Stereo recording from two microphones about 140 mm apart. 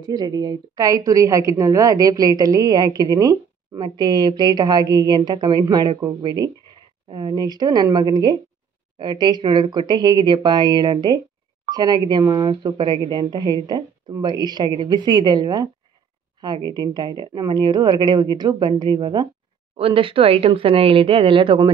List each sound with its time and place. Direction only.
0.0 s a woman's voice: 25° right (ahead or behind)